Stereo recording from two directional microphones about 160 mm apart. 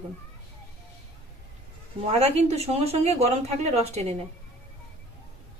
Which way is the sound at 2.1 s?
40° right (ahead or behind).